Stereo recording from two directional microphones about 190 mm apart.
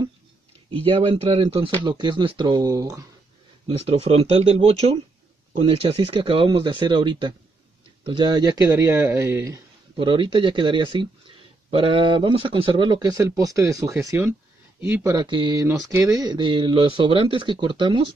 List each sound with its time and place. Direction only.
0.8 s speech: 25° right (ahead or behind)
3.6 s speech: 35° right (ahead or behind)